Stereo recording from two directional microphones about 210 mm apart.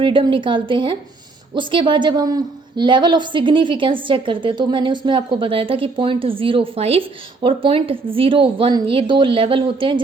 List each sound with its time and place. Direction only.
0.0 s a woman's voice: 25° right (ahead or behind)